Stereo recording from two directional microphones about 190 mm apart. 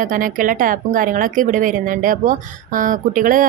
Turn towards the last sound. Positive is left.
turn(degrees=-45)  # may be behind; listen again after turning